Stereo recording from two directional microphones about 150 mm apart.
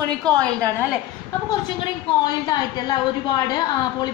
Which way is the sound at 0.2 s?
25° right (ahead or behind).